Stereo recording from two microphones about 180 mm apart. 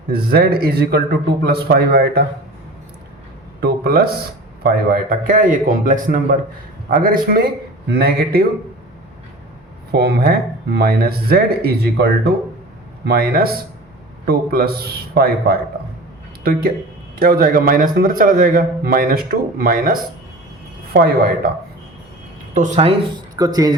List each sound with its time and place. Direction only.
0.1 s a man's voice: 60° right (ahead or behind)
3.6 s a man's voice: 60° right (ahead or behind)
9.9 s a man's voice: 65° right (ahead or behind)
13.1 s a man's voice: 60° right (ahead or behind)
22.5 s speech: 40° right (ahead or behind)
23.3 s speech: 20° right (ahead or behind)